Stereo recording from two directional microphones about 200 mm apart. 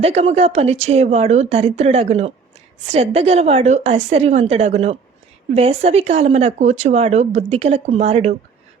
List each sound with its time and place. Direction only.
0.0 s speech: 30° right (ahead or behind)